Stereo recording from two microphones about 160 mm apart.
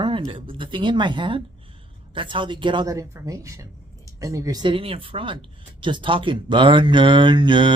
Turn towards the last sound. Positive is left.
turn(degrees=-30)  # may be behind; listen again after turning